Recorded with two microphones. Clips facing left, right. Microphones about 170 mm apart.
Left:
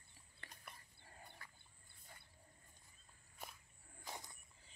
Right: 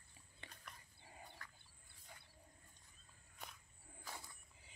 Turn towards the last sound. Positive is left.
turn(degrees=20)  # may be behind; listen again after turning